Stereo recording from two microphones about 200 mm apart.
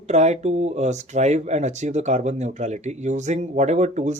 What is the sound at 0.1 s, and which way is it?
Speech, 35° right (ahead or behind).